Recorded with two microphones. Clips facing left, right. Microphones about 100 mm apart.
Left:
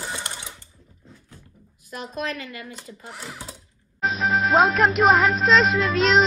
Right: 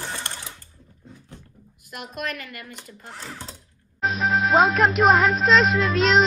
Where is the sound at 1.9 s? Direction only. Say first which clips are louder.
Left 2 dB; 30° left (ahead or behind).